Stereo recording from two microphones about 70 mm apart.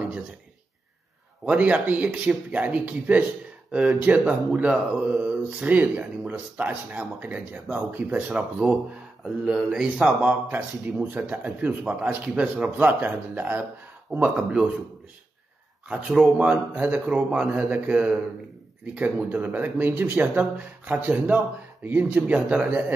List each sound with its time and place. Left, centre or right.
1.4 s speech: right
9.2 s speech: centre
10.5 s speech: right
15.9 s speech: centre
20.3 s speech: right